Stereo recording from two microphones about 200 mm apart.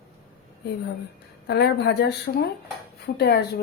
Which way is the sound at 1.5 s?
55° left (ahead or behind).